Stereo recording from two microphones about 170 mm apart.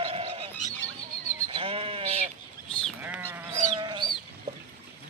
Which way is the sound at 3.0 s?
10° right (ahead or behind).